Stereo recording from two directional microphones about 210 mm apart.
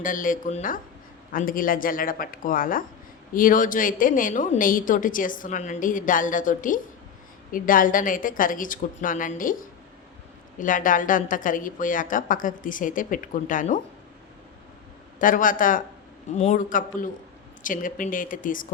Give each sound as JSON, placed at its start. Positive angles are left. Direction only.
{"t": 0.0, "sound": "a woman's voice", "side_deg": 40}
{"t": 10.6, "sound": "a woman's voice", "side_deg": 40}
{"t": 15.2, "sound": "a woman's voice", "side_deg": 40}